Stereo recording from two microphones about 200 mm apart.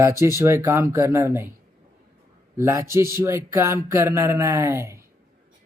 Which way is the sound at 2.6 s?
15° right (ahead or behind).